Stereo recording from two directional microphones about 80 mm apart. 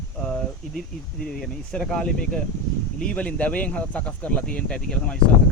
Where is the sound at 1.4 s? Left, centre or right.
Centre.